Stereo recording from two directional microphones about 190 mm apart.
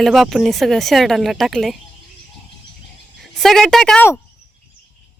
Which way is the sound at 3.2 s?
Centre (ahead or behind).